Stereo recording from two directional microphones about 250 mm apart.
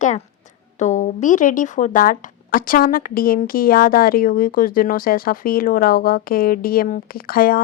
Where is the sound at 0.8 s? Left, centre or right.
Left.